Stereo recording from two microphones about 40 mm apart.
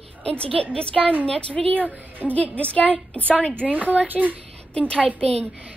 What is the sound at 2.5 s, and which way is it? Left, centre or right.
A woman's voice, left.